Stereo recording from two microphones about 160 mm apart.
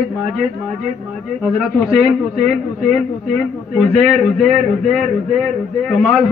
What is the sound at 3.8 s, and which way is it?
A man's voice, centre (ahead or behind).